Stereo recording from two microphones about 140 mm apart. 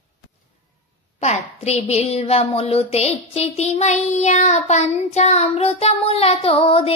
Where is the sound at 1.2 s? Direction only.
55° left (ahead or behind).